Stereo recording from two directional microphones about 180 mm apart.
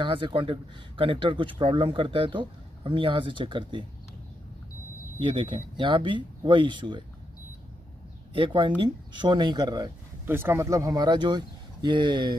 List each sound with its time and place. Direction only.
0.0 s speech: 30° right (ahead or behind)
5.2 s speech: 30° right (ahead or behind)
8.3 s speech: 30° right (ahead or behind)
10.2 s speech: 10° right (ahead or behind)